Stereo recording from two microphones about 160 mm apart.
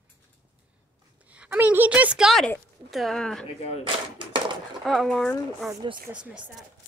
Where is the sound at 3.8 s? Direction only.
30° right (ahead or behind).